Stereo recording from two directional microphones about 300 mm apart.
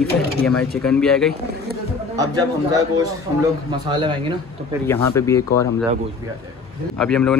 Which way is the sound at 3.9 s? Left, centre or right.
Centre.